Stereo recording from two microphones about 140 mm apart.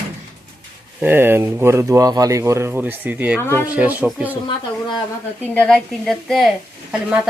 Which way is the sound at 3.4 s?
15° left (ahead or behind).